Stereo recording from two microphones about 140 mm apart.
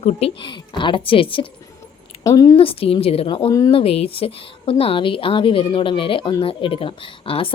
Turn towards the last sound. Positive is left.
turn(degrees=40)  # may be behind; listen again after turning